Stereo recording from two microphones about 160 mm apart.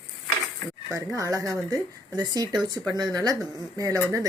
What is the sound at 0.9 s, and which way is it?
Speech, 20° right (ahead or behind).